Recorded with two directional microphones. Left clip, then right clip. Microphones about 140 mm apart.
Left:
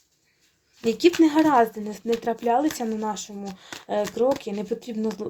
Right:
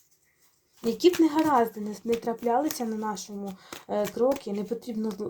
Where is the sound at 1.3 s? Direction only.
50° left (ahead or behind); by 5.1 s 35° left (ahead or behind).